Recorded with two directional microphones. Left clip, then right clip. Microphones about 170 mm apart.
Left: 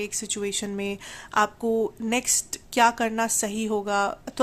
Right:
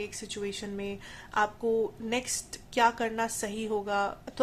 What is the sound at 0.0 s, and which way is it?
A woman's voice, 40° left (ahead or behind).